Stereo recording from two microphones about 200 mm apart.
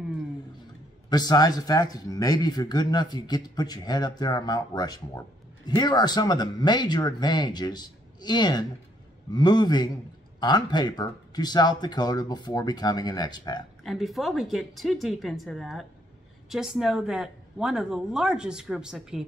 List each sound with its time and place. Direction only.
1.1 s speech: 20° left (ahead or behind)
13.8 s a woman's voice: centre (ahead or behind)